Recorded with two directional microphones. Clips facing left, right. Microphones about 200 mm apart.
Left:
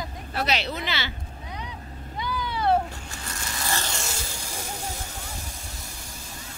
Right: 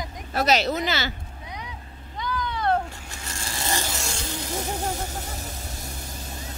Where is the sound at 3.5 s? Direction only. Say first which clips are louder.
Right 2 dB; 20° right (ahead or behind).